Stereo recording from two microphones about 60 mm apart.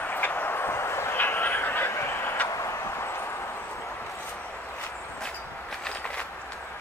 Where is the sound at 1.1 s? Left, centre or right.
Left.